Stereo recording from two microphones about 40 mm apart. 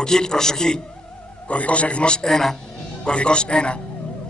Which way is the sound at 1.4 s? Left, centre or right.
Left.